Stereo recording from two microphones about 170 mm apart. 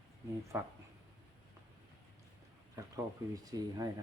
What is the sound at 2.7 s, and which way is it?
Speech, 20° right (ahead or behind).